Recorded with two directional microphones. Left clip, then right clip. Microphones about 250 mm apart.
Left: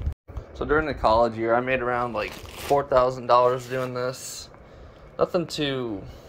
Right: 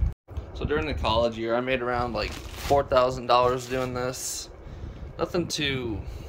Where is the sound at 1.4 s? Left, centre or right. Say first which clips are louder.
Left 3 dB; centre.